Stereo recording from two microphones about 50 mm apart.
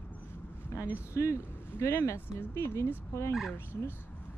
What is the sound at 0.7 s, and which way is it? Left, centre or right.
Speech, left.